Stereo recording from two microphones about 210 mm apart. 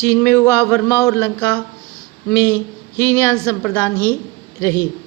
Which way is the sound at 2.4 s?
10° right (ahead or behind).